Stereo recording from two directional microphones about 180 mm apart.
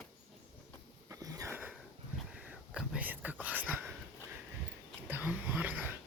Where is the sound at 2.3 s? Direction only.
5° right (ahead or behind).